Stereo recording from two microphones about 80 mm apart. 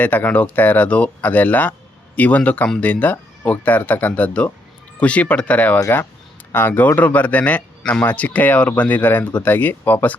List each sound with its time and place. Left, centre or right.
0.0 s a man's voice: centre